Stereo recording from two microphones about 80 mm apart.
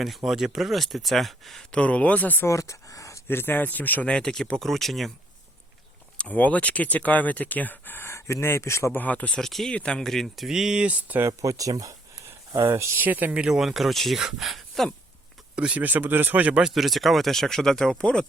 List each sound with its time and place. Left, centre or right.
0.3 s speech: centre
1.7 s speech: centre
2.5 s a sound: left
3.2 s speech: left; by 5.1 s centre
6.3 s speech: centre; by 9.0 s left
9.0 s speech: centre
9.4 s speech: centre
11.2 s speech: right
13.0 s speech: right; by 14.8 s centre
15.5 s speech: centre
16.6 s speech: centre